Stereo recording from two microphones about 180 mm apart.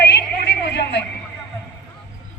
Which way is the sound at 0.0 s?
65° left (ahead or behind).